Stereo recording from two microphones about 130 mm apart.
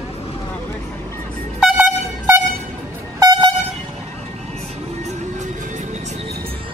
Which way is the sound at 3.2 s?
35° right (ahead or behind).